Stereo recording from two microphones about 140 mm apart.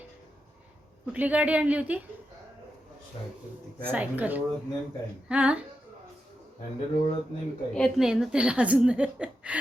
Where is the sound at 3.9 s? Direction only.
10° right (ahead or behind).